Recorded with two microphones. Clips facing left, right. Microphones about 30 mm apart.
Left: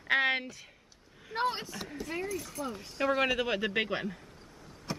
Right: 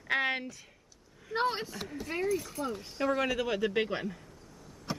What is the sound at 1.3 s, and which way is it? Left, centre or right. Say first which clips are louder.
Speech: right 1 dB; centre.